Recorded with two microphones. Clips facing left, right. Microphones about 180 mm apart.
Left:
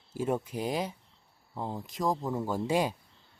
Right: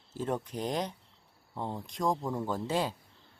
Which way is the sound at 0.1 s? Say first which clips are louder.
Left 3 dB; 10° left (ahead or behind).